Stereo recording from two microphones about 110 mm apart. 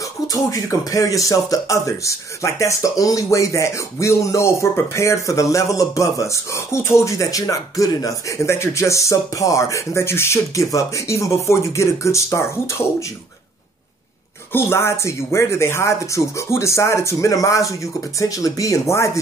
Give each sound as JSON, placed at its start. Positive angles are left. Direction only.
{"t": 0.3, "sound": "speech", "side_deg": 30}
{"t": 14.5, "sound": "speech", "side_deg": 20}